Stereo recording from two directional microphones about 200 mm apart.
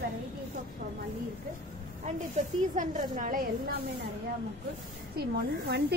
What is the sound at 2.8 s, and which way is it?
Speech, 40° right (ahead or behind).